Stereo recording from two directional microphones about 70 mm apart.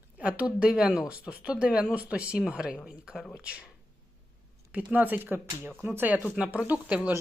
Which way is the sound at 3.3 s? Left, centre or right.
Centre.